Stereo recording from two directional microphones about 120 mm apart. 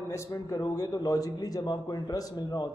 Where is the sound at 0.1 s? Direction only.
25° left (ahead or behind).